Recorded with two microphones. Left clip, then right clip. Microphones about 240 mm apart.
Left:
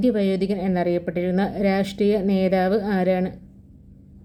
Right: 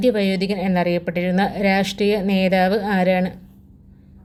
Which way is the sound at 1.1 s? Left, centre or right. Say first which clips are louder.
Right 3 dB; centre.